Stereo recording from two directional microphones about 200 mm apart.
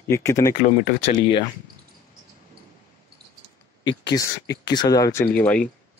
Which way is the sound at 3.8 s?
20° left (ahead or behind).